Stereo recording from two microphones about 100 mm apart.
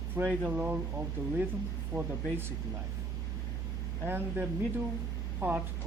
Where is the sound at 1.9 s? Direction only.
20° right (ahead or behind).